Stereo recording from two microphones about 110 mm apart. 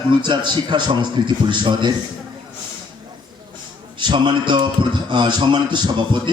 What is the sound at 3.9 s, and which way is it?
A man's voice, 45° right (ahead or behind).